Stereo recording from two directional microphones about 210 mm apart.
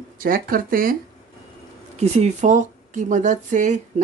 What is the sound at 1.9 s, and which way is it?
Speech, 30° right (ahead or behind).